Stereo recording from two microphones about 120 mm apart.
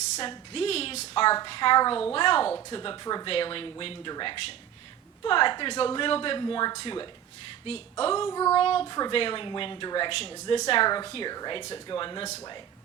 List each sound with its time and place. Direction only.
0.2 s speech: 50° left (ahead or behind)
3.2 s speech: 50° left (ahead or behind)
7.6 s speech: 50° left (ahead or behind)
8.3 s child singing: 30° left (ahead or behind)
8.5 s speech: 50° left (ahead or behind)